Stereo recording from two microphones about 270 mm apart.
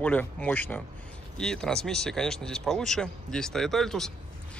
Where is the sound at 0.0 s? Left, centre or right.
Centre.